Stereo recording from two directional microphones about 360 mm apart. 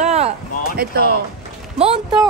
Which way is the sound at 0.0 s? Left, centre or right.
Centre.